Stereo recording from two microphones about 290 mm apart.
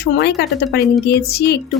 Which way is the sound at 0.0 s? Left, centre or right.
Left.